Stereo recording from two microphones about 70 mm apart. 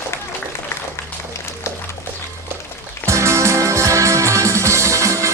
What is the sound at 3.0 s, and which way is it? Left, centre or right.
Music, right.